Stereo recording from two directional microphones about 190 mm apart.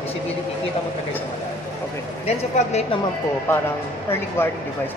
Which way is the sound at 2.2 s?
35° left (ahead or behind).